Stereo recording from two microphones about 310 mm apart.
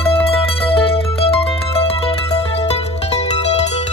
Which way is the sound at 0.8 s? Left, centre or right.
Centre.